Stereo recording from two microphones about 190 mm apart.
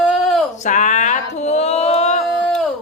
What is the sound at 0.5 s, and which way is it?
Speech, 40° left (ahead or behind).